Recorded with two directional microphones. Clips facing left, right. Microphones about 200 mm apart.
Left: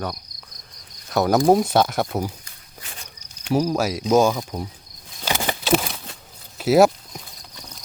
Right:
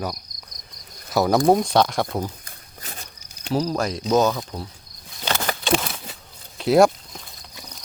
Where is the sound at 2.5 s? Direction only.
40° right (ahead or behind).